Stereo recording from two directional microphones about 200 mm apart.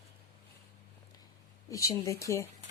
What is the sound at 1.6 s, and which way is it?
Speech, 15° left (ahead or behind).